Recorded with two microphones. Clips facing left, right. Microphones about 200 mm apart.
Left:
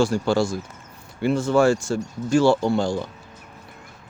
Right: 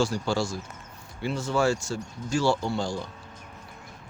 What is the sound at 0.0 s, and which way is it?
Speech, 55° left (ahead or behind).